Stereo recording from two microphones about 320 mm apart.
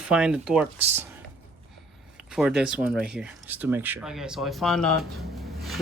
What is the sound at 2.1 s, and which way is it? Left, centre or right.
Speech, centre.